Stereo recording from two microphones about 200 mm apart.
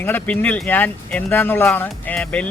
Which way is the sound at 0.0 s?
10° left (ahead or behind).